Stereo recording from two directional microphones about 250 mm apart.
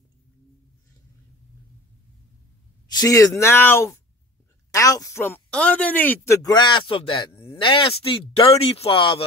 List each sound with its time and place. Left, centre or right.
2.9 s speech: centre